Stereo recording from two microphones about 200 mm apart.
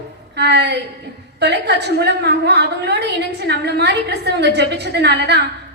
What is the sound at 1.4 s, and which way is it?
A woman's voice, 55° right (ahead or behind).